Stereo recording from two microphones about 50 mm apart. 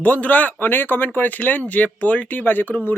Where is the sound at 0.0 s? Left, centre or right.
Left.